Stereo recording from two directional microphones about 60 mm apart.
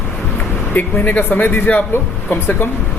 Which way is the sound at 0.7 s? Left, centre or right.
Left.